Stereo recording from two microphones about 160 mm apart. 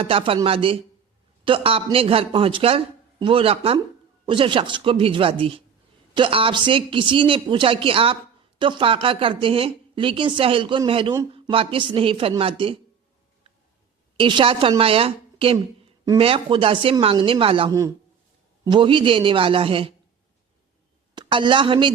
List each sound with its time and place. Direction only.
0.0 s a woman's voice: 35° right (ahead or behind)
14.2 s a woman's voice: 30° right (ahead or behind)
17.7 s a woman's voice: 20° right (ahead or behind)
21.2 s a woman's voice: 30° right (ahead or behind)